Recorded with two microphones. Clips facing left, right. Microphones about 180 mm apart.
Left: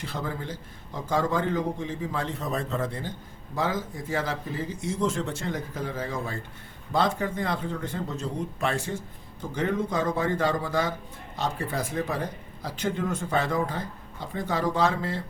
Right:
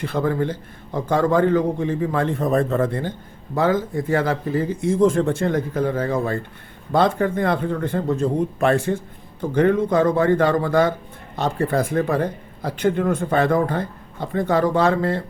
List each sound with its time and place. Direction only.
0.0 s speech: 60° right (ahead or behind)